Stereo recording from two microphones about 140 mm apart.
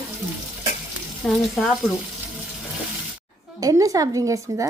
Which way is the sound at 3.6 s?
25° right (ahead or behind).